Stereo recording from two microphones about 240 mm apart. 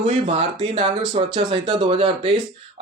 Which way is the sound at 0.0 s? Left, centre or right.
Right.